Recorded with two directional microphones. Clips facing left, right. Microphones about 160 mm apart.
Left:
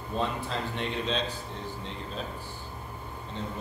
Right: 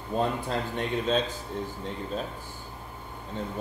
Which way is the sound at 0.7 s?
50° right (ahead or behind).